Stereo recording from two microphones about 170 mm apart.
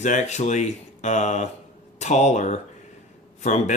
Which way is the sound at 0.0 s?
45° left (ahead or behind).